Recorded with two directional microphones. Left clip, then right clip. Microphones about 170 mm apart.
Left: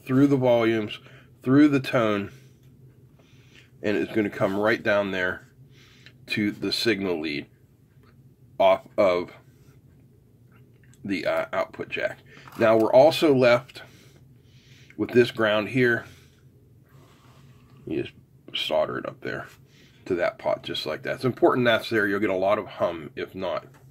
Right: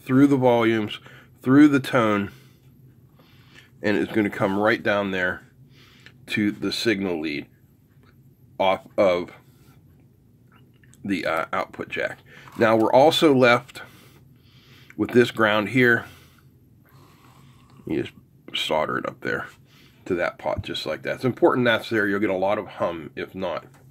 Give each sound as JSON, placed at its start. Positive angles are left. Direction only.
{"t": 0.0, "sound": "speech", "side_deg": -25}
{"t": 3.5, "sound": "speech", "side_deg": -25}
{"t": 8.5, "sound": "speech", "side_deg": -15}
{"t": 11.1, "sound": "speech", "side_deg": -20}
{"t": 17.8, "sound": "speech", "side_deg": -30}
{"t": 20.0, "sound": "speech", "side_deg": -15}